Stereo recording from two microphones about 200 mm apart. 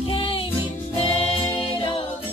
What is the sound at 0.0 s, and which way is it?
Music, 25° left (ahead or behind).